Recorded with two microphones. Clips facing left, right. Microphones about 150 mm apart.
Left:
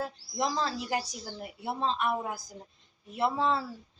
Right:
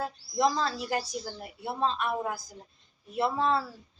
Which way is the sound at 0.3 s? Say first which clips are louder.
Right 4 dB; 20° left (ahead or behind).